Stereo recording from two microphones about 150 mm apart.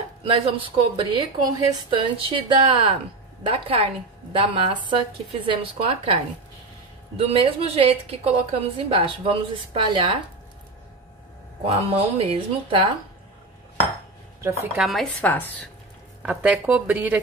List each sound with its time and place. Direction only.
0.3 s a woman's voice: 35° right (ahead or behind)
7.2 s a woman's voice: 40° right (ahead or behind)
11.6 s a woman's voice: 40° right (ahead or behind)
14.4 s speech: 20° right (ahead or behind)
14.8 s speech: centre (ahead or behind)
16.2 s a woman's voice: 10° right (ahead or behind)